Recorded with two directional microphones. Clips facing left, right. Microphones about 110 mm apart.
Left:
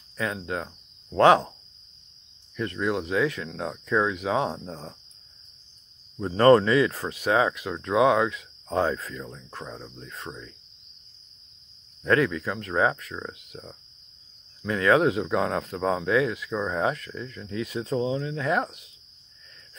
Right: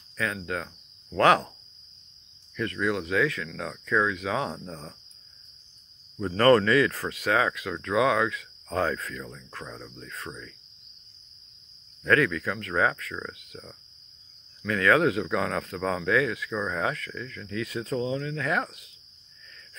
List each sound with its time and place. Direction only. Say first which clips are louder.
0.2 s speech: left 1 dB; 25° left (ahead or behind)
2.5 s speech: left 1 dB; 25° left (ahead or behind)
6.1 s speech: left 3 dB; 20° left (ahead or behind)
12.0 s speech: left 1 dB; 25° left (ahead or behind)